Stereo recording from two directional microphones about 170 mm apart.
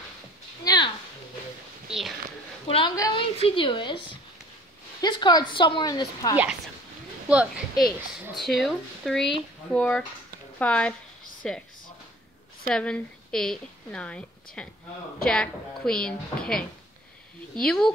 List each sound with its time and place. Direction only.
0.7 s a sound: 25° left (ahead or behind)
1.9 s speech: centre (ahead or behind)
3.0 s a woman's voice: 30° left (ahead or behind)
7.2 s speech: 5° right (ahead or behind)
12.6 s a woman's voice: 5° left (ahead or behind)